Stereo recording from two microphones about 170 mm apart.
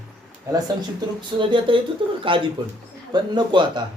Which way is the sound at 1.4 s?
30° right (ahead or behind).